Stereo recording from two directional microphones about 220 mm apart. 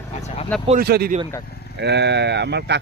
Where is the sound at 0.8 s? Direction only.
45° right (ahead or behind).